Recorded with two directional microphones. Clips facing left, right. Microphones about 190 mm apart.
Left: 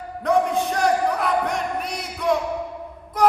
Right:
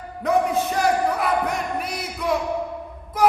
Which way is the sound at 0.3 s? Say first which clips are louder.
Even; 5° right (ahead or behind).